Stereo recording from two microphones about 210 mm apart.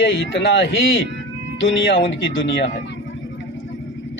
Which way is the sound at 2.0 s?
60° left (ahead or behind).